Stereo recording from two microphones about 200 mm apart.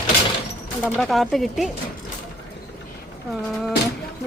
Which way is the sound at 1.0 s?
Centre (ahead or behind).